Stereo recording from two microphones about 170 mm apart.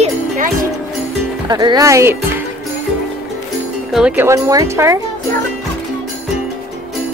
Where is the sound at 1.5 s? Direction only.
25° right (ahead or behind).